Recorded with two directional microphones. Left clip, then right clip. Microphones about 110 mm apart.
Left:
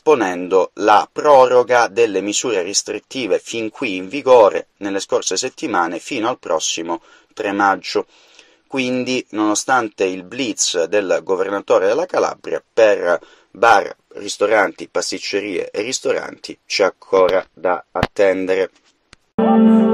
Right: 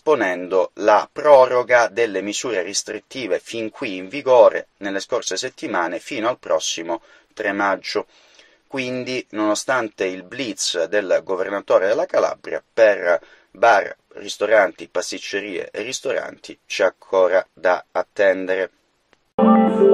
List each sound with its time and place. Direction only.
0.0 s speech: 40° left (ahead or behind)
17.4 s speech: 25° left (ahead or behind)
18.1 s speech: 45° left (ahead or behind)